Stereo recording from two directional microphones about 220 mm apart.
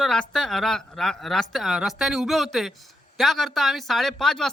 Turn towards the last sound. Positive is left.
turn(degrees=0)  # may be behind; listen again after turning